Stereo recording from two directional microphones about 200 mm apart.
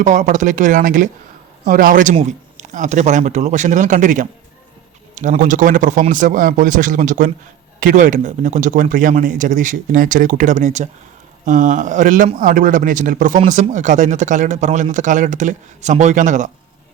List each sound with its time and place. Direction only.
0.0 s a man's voice: 40° right (ahead or behind)